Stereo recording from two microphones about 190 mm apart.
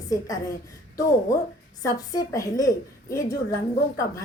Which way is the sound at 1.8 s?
20° left (ahead or behind).